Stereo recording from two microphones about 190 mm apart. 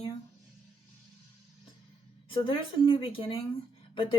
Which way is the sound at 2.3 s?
25° left (ahead or behind).